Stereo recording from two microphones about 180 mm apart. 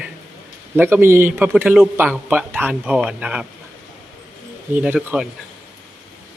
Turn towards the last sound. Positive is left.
turn(degrees=-5)  # may be behind; listen again after turning